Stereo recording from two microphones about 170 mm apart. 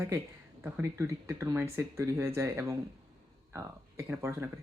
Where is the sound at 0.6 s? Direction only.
10° right (ahead or behind).